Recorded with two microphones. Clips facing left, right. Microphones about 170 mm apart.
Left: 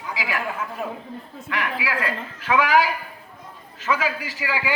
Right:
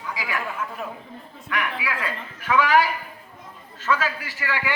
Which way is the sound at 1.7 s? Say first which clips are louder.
Left 3 dB; 10° left (ahead or behind).